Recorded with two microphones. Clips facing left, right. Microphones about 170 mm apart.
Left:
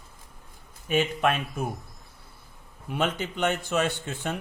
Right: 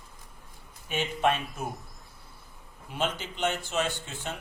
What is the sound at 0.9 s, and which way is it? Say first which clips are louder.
Speech: left 3 dB; 55° left (ahead or behind).